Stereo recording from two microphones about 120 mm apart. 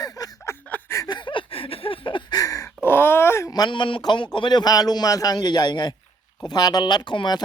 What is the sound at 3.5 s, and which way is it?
Speech, 40° left (ahead or behind).